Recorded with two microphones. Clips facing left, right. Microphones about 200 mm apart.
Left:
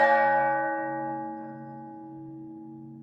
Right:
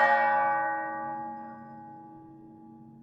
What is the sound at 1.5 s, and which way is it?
Singing bowl, 30° left (ahead or behind).